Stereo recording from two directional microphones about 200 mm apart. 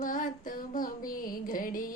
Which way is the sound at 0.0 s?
40° left (ahead or behind).